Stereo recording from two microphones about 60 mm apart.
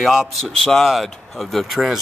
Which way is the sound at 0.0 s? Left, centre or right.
Centre.